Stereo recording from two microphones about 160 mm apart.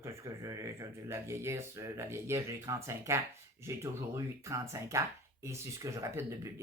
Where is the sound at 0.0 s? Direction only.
20° right (ahead or behind).